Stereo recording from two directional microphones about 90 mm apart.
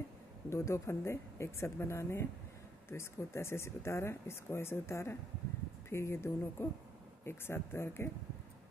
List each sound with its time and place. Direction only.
0.5 s speech: 30° left (ahead or behind)